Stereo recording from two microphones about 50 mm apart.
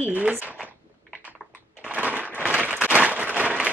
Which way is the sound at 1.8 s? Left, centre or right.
Right.